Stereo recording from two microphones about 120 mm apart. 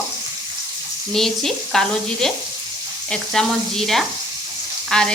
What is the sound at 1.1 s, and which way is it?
Speech, 5° left (ahead or behind).